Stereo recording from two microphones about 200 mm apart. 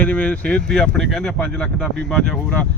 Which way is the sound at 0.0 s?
5° left (ahead or behind).